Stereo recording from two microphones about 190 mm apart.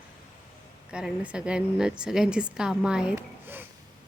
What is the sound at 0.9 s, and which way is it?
Speech, 5° right (ahead or behind).